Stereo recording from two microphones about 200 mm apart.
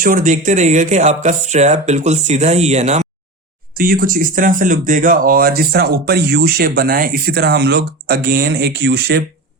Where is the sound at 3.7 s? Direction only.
45° right (ahead or behind).